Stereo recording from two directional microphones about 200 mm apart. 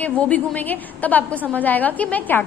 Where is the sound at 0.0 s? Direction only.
5° left (ahead or behind).